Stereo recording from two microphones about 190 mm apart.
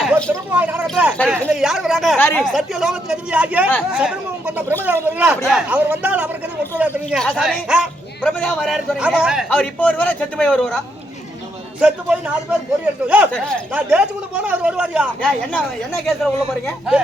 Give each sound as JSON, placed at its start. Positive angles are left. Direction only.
{"t": 0.5, "sound": "a man's voice", "side_deg": -10}
{"t": 2.1, "sound": "speech", "side_deg": 10}
{"t": 2.4, "sound": "a man's voice", "side_deg": 0}
{"t": 8.2, "sound": "a man's voice", "side_deg": 5}